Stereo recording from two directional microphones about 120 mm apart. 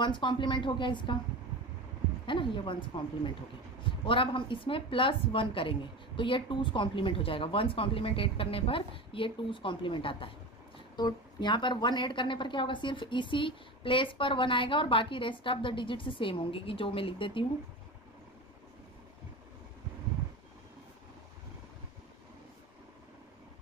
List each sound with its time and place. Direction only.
0.0 s a woman's voice: 40° left (ahead or behind)
2.2 s a woman's voice: 45° left (ahead or behind)
3.8 s a woman's voice: 45° left (ahead or behind)